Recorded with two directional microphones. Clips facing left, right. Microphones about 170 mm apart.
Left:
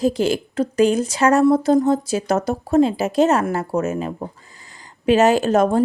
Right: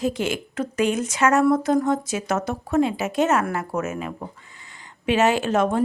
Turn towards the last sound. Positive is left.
turn(degrees=40)  # may be behind; listen again after turning